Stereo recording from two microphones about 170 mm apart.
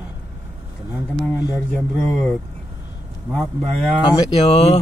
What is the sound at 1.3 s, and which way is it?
Speech, 20° left (ahead or behind).